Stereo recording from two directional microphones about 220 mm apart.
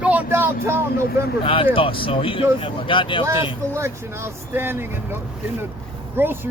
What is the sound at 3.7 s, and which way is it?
Speech, 10° right (ahead or behind).